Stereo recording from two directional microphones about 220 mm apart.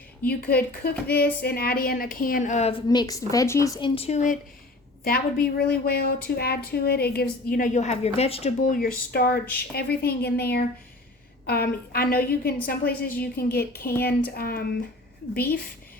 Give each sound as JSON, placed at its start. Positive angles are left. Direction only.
{"t": 0.3, "sound": "speech", "side_deg": 45}
{"t": 5.5, "sound": "speech", "side_deg": 45}
{"t": 8.8, "sound": "speech", "side_deg": 45}